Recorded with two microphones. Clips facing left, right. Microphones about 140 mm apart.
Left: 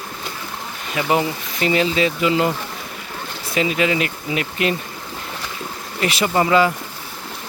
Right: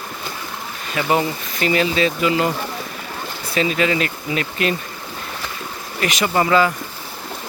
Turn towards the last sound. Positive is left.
turn(degrees=20)  # may be behind; listen again after turning